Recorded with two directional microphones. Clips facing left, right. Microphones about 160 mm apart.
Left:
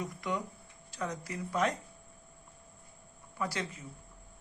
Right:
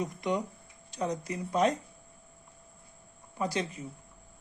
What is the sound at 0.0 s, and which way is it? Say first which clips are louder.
A woman's voice: right 5 dB; 20° right (ahead or behind).